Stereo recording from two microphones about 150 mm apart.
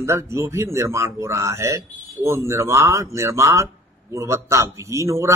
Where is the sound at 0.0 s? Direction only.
20° right (ahead or behind).